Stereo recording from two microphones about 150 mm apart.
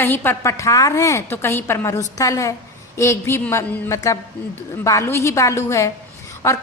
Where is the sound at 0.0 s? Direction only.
15° left (ahead or behind).